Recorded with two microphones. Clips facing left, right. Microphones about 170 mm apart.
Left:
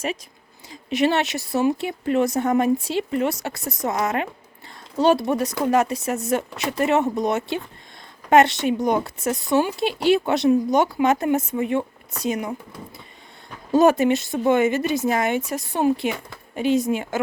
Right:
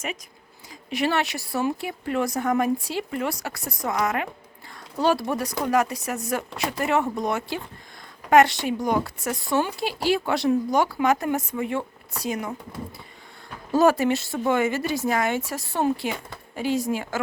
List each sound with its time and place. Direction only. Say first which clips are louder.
0.7 s speech: left 4 dB; 25° left (ahead or behind)
13.7 s speech: left 3 dB; 20° left (ahead or behind)